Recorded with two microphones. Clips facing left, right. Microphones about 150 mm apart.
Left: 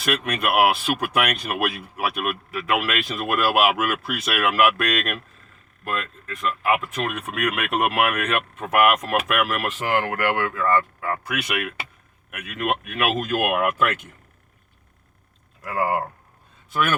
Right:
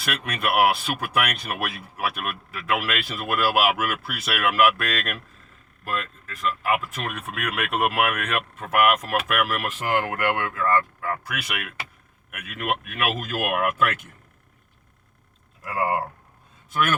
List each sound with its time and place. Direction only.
0.0 s speech: centre (ahead or behind)
1.5 s speech: 20° left (ahead or behind)
1.7 s speech: centre (ahead or behind)
15.6 s speech: centre (ahead or behind)